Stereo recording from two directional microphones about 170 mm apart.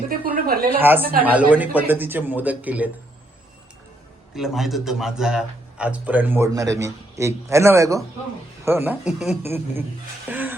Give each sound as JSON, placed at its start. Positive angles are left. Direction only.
{"t": 0.1, "sound": "a sound", "side_deg": -60}
{"t": 0.8, "sound": "a man's voice", "side_deg": -10}
{"t": 4.4, "sound": "a man's voice", "side_deg": 0}